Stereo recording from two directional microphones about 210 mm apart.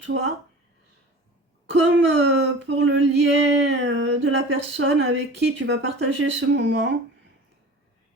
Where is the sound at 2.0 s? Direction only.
60° right (ahead or behind).